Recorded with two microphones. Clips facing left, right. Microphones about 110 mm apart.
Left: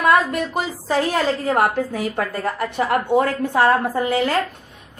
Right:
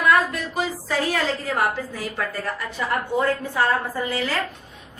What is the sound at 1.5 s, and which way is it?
A woman's voice, 60° left (ahead or behind).